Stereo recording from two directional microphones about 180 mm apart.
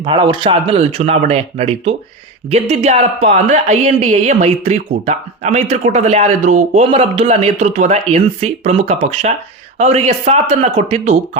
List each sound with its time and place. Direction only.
0.0 s a woman's voice: 25° right (ahead or behind)